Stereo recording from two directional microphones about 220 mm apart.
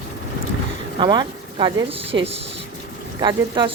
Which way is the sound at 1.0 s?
20° right (ahead or behind).